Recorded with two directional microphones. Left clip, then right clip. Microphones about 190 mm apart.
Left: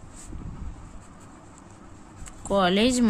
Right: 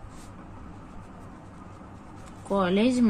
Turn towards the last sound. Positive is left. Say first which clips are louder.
# left 2 dB
turn(degrees=45)  # may be behind; listen again after turning